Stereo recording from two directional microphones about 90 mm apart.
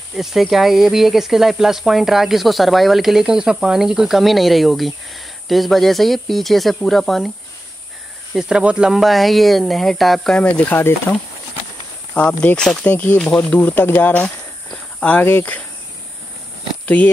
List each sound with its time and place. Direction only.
0.1 s speech: 5° right (ahead or behind)
8.4 s speech: 10° right (ahead or behind)
10.6 s speech: 25° left (ahead or behind)
12.1 s speech: 15° left (ahead or behind)
16.8 s speech: 15° left (ahead or behind)